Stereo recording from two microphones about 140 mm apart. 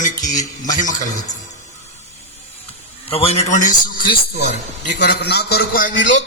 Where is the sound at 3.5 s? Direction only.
75° left (ahead or behind).